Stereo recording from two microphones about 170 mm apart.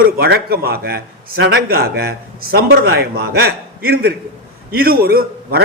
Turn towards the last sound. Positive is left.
turn(degrees=-65)  # may be behind; listen again after turning